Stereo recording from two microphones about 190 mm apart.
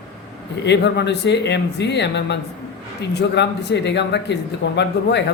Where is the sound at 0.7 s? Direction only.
65° left (ahead or behind).